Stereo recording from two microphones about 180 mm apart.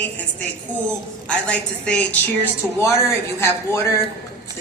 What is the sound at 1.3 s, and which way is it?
A woman's voice, 5° left (ahead or behind).